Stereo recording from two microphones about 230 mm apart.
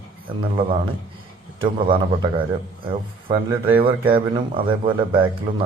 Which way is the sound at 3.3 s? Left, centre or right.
Centre.